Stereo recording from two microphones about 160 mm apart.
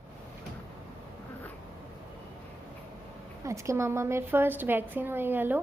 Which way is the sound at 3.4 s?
20° right (ahead or behind).